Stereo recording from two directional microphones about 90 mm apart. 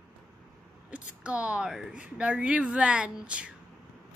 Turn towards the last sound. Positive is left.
turn(degrees=-10)  # may be behind; listen again after turning